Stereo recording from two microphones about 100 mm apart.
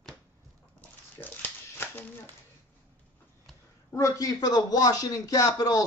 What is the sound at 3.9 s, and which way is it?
A child's voice, 35° left (ahead or behind).